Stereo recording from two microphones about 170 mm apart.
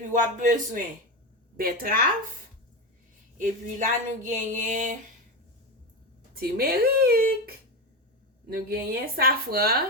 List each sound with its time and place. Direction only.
0.1 s a woman's voice: 50° right (ahead or behind)
3.3 s speech: 50° right (ahead or behind)
6.3 s a woman's voice: 65° right (ahead or behind)